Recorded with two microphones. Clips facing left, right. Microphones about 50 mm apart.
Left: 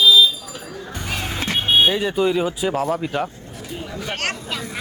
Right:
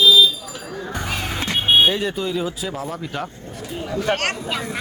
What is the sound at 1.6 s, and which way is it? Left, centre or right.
Speech, centre.